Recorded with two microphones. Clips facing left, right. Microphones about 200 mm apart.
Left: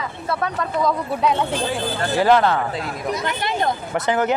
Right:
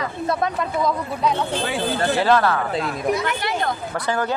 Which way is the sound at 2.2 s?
20° left (ahead or behind).